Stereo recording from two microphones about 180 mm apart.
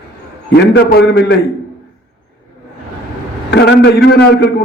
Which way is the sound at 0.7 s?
65° left (ahead or behind).